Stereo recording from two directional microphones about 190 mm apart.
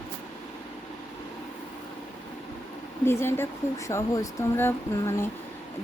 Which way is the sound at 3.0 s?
10° left (ahead or behind).